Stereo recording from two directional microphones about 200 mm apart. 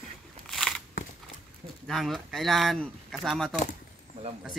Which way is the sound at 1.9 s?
Centre (ahead or behind).